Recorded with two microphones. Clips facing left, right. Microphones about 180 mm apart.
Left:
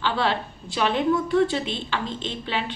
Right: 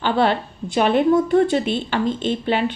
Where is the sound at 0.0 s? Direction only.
50° right (ahead or behind).